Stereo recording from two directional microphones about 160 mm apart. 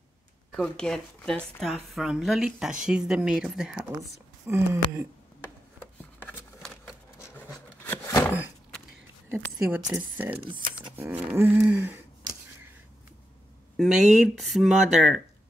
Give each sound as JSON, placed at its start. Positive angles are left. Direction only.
{"t": 0.5, "sound": "speech", "side_deg": 5}
{"t": 3.9, "sound": "speech", "side_deg": -20}
{"t": 7.2, "sound": "a sound", "side_deg": 15}
{"t": 9.3, "sound": "speech", "side_deg": -15}
{"t": 11.0, "sound": "a sound", "side_deg": -10}
{"t": 13.7, "sound": "speech", "side_deg": -5}